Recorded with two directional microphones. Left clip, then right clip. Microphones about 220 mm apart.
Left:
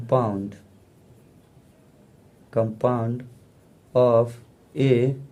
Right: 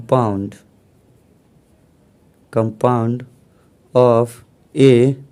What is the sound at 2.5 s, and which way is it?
Speech, 50° right (ahead or behind).